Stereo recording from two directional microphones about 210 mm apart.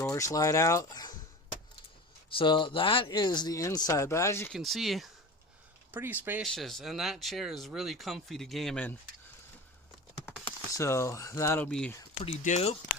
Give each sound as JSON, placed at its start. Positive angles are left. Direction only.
{"t": 0.0, "sound": "speech", "side_deg": 15}
{"t": 2.3, "sound": "speech", "side_deg": 25}
{"t": 4.5, "sound": "speech", "side_deg": 0}
{"t": 6.4, "sound": "speech", "side_deg": 0}
{"t": 10.2, "sound": "speech", "side_deg": 15}
{"t": 12.2, "sound": "speech", "side_deg": 35}